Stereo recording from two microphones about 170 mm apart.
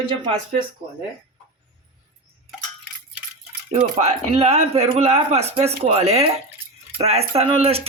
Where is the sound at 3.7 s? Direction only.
40° right (ahead or behind).